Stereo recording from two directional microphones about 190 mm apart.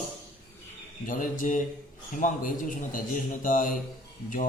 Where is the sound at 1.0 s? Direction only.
45° left (ahead or behind).